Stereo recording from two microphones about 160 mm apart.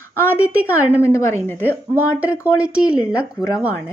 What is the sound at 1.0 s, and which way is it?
Speech, 20° left (ahead or behind).